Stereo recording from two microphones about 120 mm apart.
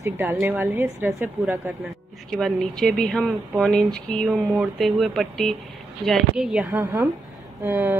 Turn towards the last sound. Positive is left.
turn(degrees=-15)  # may be behind; listen again after turning